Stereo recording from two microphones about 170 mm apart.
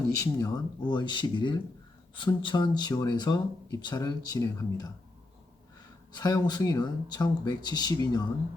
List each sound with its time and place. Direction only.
0.2 s speech: 20° left (ahead or behind)
6.1 s speech: 25° left (ahead or behind)